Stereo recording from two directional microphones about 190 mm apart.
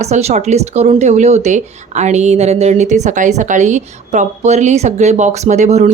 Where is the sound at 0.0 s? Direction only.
35° right (ahead or behind).